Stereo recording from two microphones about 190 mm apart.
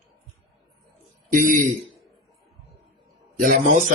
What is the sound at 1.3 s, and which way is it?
Speech, 45° right (ahead or behind).